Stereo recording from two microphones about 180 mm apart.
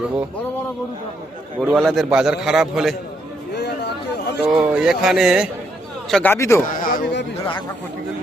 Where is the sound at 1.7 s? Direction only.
Centre (ahead or behind).